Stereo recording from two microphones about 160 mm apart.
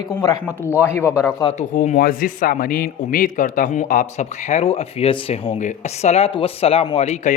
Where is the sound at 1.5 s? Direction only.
45° left (ahead or behind).